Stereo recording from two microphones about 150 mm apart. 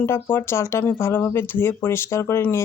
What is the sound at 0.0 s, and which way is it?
Speech, 15° left (ahead or behind).